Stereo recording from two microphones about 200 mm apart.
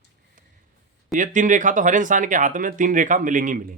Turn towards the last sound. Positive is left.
turn(degrees=-40)  # may be behind; listen again after turning